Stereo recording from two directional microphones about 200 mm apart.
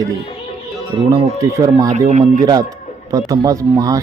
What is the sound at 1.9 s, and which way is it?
Speech, 35° right (ahead or behind).